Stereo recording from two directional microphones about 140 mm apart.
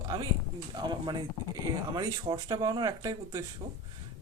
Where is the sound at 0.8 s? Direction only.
30° right (ahead or behind).